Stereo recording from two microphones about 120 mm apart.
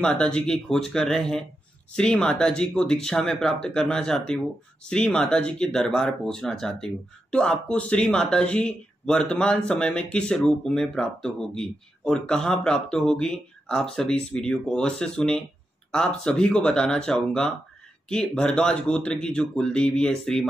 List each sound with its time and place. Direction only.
0.0 s speech: 10° left (ahead or behind)